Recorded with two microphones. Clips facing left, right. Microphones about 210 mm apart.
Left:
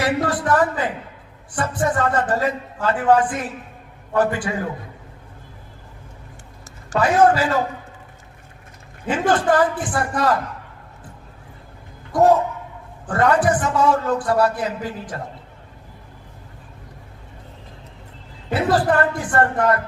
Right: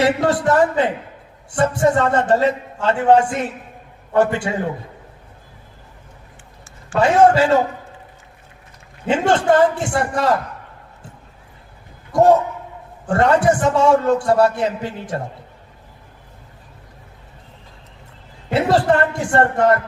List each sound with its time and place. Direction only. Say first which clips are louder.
0.0 s a man's voice: right 4 dB; 25° right (ahead or behind)
7.0 s a man's voice: right 3 dB; 25° right (ahead or behind)
9.0 s a man's voice: right 3 dB; 25° right (ahead or behind)
13.1 s a man's voice: right 3 dB; 25° right (ahead or behind)
18.5 s a man's voice: right 2 dB; 25° right (ahead or behind)